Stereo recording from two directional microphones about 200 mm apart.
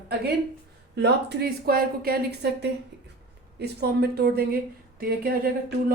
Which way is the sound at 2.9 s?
60° right (ahead or behind).